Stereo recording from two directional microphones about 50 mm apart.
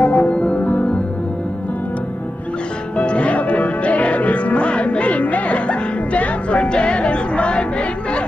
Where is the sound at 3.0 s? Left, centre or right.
Left.